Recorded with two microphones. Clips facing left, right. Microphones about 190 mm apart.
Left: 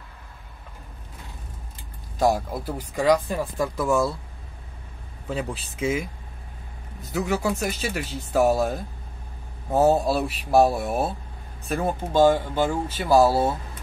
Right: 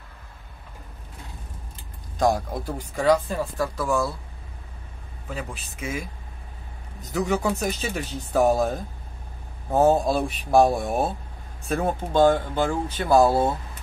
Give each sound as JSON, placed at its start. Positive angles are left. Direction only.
{"t": 2.1, "sound": "speech", "side_deg": 5}
{"t": 5.3, "sound": "speech", "side_deg": 25}
{"t": 7.2, "sound": "speech", "side_deg": 5}